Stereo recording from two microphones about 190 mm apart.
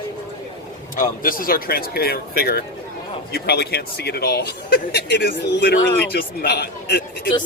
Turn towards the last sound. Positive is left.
turn(degrees=60)  # may be behind; listen again after turning